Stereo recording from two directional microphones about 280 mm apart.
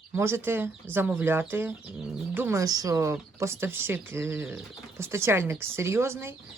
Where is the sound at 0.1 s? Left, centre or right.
Centre.